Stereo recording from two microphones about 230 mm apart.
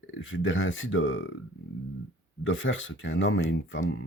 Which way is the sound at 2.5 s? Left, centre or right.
Left.